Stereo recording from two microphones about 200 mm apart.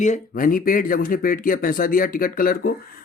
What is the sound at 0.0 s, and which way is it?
Speech, 40° left (ahead or behind).